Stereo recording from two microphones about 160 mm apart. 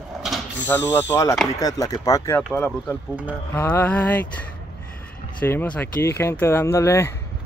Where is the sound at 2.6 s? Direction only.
10° right (ahead or behind).